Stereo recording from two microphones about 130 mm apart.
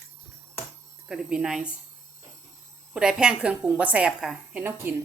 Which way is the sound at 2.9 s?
5° right (ahead or behind).